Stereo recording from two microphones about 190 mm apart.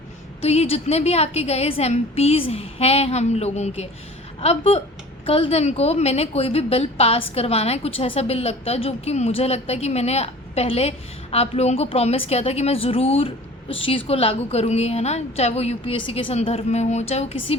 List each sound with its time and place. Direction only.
0.4 s a woman's voice: 35° left (ahead or behind)